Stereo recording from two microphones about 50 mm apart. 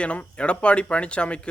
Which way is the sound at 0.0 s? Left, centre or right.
Left.